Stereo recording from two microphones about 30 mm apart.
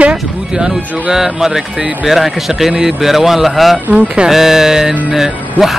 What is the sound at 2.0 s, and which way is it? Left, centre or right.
Speech, centre.